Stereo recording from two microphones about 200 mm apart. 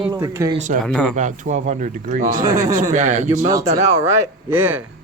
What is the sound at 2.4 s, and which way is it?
Speech, 15° right (ahead or behind).